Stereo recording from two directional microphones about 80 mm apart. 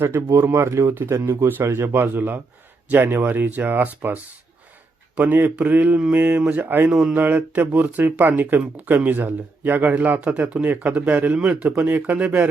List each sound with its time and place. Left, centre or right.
0.2 s speech: right; by 12.5 s centre